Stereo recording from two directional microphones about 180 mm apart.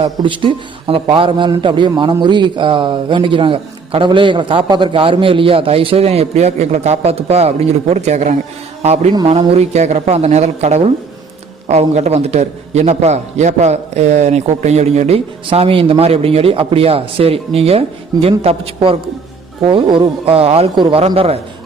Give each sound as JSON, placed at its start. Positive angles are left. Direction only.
{"t": 0.0, "sound": "a man's voice", "side_deg": -25}
{"t": 9.1, "sound": "a man's voice", "side_deg": -25}